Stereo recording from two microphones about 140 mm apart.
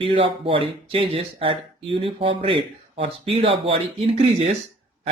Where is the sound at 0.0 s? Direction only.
40° right (ahead or behind).